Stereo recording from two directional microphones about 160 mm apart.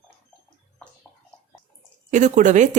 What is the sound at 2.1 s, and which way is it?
Speech, 50° right (ahead or behind).